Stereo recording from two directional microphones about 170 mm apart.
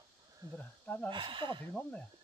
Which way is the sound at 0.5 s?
10° left (ahead or behind).